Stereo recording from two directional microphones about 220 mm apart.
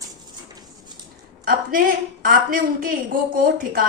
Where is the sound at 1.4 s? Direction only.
40° right (ahead or behind).